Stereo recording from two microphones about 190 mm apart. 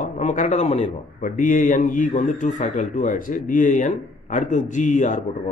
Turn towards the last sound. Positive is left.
turn(degrees=40)  # may be behind; listen again after turning